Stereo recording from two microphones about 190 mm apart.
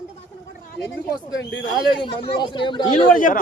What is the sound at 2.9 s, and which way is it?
Speech, 45° left (ahead or behind).